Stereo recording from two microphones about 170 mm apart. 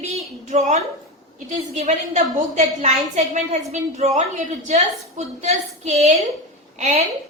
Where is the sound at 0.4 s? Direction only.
45° right (ahead or behind).